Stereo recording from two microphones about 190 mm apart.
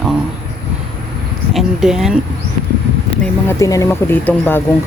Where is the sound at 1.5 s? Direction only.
Centre (ahead or behind).